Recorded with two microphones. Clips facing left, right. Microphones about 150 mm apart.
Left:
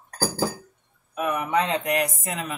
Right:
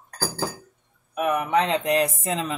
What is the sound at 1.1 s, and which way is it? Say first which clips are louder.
Speech: right 2 dB; 20° right (ahead or behind).